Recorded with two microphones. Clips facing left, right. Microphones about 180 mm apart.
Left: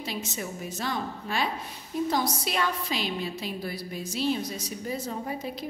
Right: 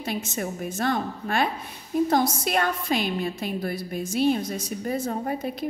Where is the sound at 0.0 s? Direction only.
50° right (ahead or behind).